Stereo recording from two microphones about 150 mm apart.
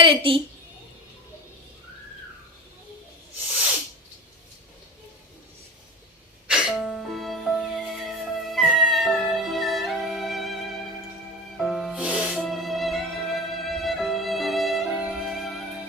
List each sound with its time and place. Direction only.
0.0 s a woman's voice: 35° right (ahead or behind)
6.5 s music: centre (ahead or behind)